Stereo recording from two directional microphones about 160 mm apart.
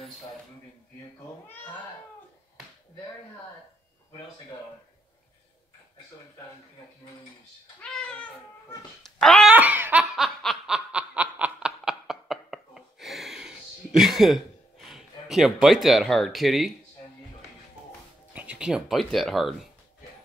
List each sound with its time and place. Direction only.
7.8 s cat: 5° left (ahead or behind)
9.0 s dog: 5° left (ahead or behind)
9.5 s snicker: 10° right (ahead or behind)
18.3 s speech: 10° right (ahead or behind)